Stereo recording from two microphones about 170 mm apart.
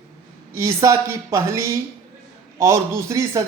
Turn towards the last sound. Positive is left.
turn(degrees=-15)  # may be behind; listen again after turning